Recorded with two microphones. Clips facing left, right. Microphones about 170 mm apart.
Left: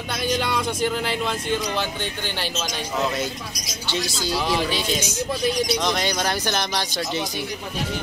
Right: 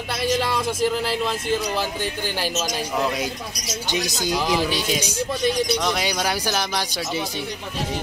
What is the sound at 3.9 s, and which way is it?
Speech, 15° right (ahead or behind).